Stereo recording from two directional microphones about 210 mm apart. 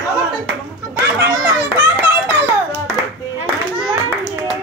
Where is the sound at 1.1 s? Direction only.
15° right (ahead or behind).